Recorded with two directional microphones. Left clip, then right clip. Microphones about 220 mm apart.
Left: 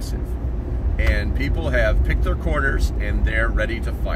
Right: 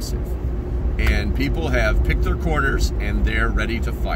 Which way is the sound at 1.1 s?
15° right (ahead or behind).